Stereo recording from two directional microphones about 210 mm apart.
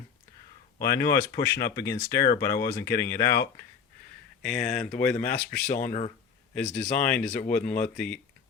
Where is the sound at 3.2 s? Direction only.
50° left (ahead or behind).